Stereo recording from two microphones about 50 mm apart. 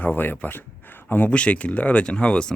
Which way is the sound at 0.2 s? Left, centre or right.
Left.